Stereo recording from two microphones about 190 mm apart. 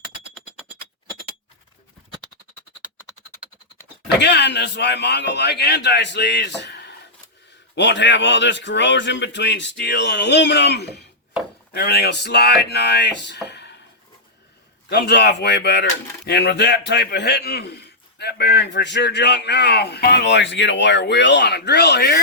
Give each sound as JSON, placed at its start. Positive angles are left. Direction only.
{"t": 4.2, "sound": "a man's voice", "side_deg": 65}
{"t": 14.8, "sound": "speech", "side_deg": 60}